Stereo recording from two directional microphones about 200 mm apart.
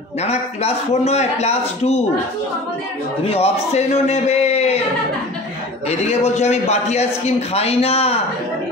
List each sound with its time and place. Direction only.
0.2 s a man's voice: 30° left (ahead or behind)
3.3 s a man's voice: 30° left (ahead or behind)
5.9 s a man's voice: 30° left (ahead or behind)